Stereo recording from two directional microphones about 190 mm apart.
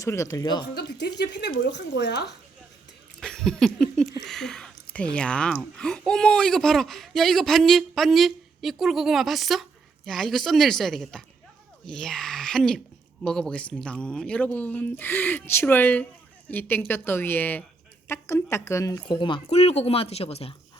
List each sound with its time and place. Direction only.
0.0 s speech: 15° left (ahead or behind)
0.7 s speech: 60° left (ahead or behind)
3.2 s a sound: 5° left (ahead or behind)
4.3 s speech: centre (ahead or behind); by 20.6 s 30° left (ahead or behind)